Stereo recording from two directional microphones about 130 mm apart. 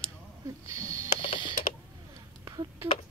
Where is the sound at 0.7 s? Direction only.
25° right (ahead or behind).